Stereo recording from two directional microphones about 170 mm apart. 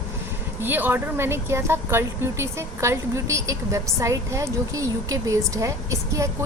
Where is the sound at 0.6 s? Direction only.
10° right (ahead or behind).